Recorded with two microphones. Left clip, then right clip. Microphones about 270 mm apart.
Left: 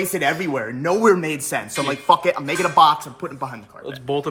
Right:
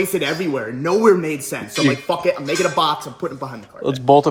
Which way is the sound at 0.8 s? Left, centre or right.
Left.